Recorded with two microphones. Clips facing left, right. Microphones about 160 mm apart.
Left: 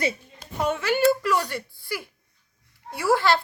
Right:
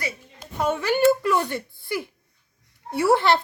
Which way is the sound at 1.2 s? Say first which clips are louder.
Right 2 dB; 20° right (ahead or behind).